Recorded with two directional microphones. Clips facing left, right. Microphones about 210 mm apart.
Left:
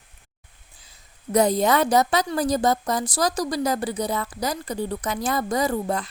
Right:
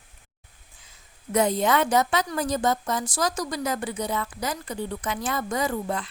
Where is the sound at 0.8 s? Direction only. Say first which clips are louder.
Even; 35° left (ahead or behind).